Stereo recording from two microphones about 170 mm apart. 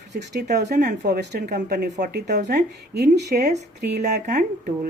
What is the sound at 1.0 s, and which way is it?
Speech, 80° right.